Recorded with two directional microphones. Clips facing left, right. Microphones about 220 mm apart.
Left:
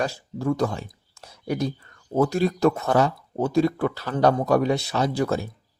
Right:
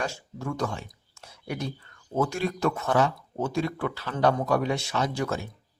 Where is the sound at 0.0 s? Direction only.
35° left (ahead or behind).